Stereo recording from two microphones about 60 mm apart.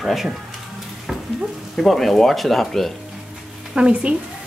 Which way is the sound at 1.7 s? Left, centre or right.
Centre.